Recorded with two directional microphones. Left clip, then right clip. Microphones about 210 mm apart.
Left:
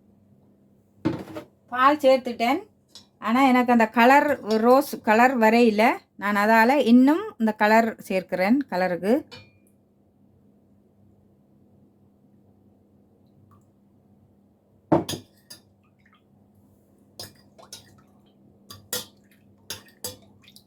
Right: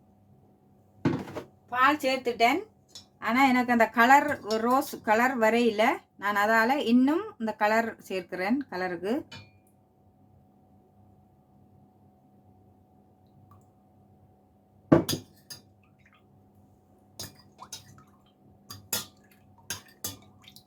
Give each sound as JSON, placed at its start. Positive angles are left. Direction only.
{"t": 1.8, "sound": "speech", "side_deg": 15}